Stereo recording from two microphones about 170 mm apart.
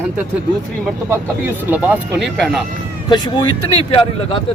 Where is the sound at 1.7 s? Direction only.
10° right (ahead or behind).